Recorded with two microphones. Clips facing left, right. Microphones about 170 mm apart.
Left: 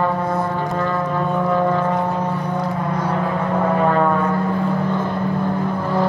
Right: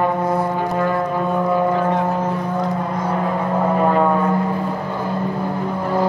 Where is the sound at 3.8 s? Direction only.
10° right (ahead or behind).